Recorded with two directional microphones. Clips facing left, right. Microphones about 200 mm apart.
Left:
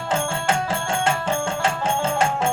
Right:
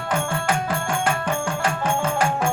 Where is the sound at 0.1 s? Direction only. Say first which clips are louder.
Left 1 dB; 25° left (ahead or behind).